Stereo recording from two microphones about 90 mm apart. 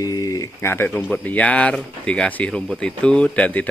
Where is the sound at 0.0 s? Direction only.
40° left (ahead or behind).